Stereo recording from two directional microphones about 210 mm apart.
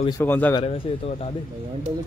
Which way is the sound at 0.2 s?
10° left (ahead or behind).